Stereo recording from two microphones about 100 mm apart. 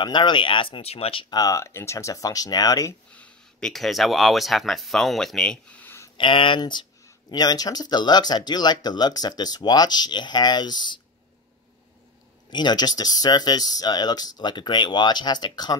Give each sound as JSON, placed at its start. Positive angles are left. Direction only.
{"t": 0.0, "sound": "speech", "side_deg": 50}
{"t": 1.3, "sound": "speech", "side_deg": 35}
{"t": 3.1, "sound": "speech", "side_deg": 10}
{"t": 6.1, "sound": "speech", "side_deg": 60}
{"t": 6.6, "sound": "speech", "side_deg": 50}
{"t": 12.4, "sound": "speech", "side_deg": 50}